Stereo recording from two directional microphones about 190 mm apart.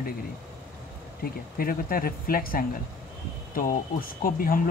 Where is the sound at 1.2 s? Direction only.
50° left (ahead or behind).